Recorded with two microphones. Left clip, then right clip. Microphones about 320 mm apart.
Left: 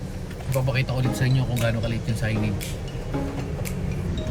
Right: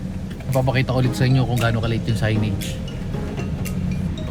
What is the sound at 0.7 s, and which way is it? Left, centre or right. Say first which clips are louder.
Speech: right 5 dB; centre.